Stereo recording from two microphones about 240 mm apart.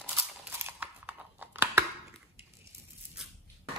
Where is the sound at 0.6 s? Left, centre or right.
Centre.